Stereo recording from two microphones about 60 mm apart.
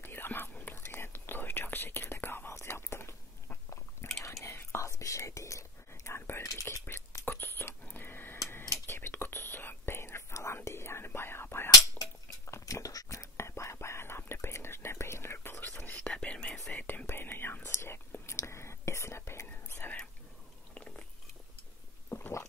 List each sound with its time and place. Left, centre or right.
0.0 s whispering: left
0.7 s whispering: left
2.5 s whispering: left
4.2 s whispering: left
4.5 s whispering: left
6.4 s whispering: left
6.9 s whispering: left
12.4 s whispering: left
15.8 s whispering: left
16.7 s whispering: left
19.8 s whispering: left
22.1 s a sound: left